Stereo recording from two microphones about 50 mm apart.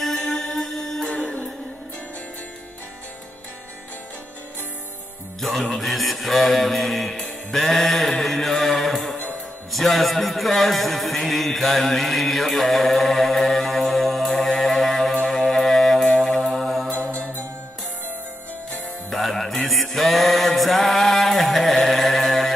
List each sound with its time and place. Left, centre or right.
0.0 s music: centre
5.4 s speech: centre
9.7 s a sound: centre
15.2 s music: centre
16.4 s mantra: centre
19.0 s music: centre